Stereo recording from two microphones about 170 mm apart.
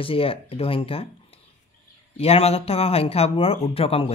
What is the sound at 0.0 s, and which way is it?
Speech, 35° left (ahead or behind).